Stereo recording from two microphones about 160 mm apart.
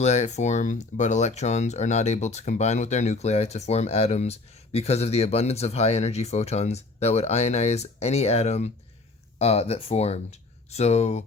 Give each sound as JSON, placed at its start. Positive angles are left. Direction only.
{"t": 0.0, "sound": "speech", "side_deg": 45}